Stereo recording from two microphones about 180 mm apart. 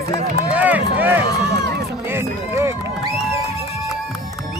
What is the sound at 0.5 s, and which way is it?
Run, 10° right (ahead or behind).